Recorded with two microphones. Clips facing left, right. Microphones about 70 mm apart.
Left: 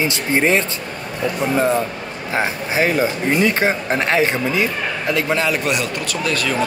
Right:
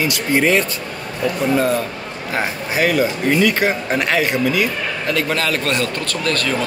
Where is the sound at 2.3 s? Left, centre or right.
Left; by 6.5 s centre.